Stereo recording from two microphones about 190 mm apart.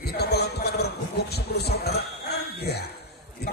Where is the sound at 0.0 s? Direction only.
60° left (ahead or behind).